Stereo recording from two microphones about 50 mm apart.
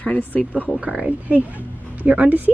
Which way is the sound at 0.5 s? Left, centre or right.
Right.